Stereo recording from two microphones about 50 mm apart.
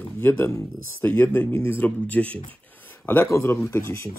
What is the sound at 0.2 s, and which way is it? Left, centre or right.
Speech, left.